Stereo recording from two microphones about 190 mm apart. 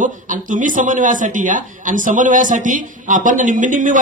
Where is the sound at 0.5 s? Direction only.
45° right (ahead or behind).